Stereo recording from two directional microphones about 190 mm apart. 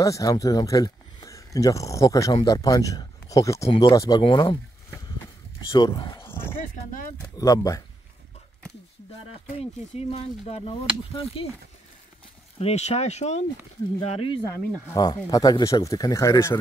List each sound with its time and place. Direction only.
0.0 s speech: 15° left (ahead or behind)
6.1 s a sound: 10° left (ahead or behind)
7.3 s speech: 20° left (ahead or behind)
9.6 s speech: 30° left (ahead or behind)
12.5 s speech: 35° left (ahead or behind)
15.1 s speech: 15° left (ahead or behind)